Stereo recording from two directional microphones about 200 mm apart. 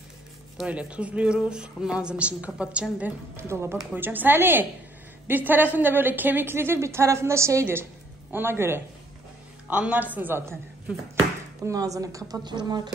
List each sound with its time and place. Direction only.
0.6 s a woman's voice: 5° right (ahead or behind)
11.6 s a woman's voice: 15° right (ahead or behind)